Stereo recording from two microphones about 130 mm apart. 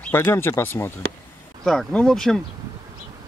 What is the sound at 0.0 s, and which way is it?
Speech, 20° left (ahead or behind).